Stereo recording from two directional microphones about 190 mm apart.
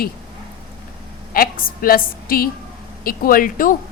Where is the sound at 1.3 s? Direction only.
50° left (ahead or behind).